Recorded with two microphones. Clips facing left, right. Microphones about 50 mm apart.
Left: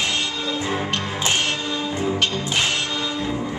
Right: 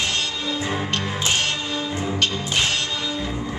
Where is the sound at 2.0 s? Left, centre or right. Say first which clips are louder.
Left 2 dB; centre.